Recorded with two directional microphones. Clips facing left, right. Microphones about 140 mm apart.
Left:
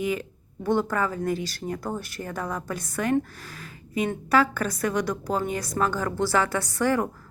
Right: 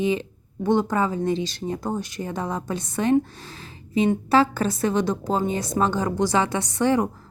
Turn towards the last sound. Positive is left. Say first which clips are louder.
# right 3 dB
turn(degrees=-20)  # may be behind; listen again after turning